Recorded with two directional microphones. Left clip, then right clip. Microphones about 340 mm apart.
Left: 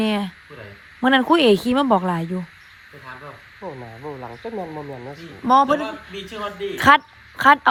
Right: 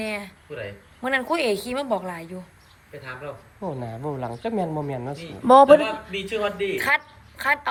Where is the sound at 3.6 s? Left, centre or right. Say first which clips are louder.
Right 2 dB; right.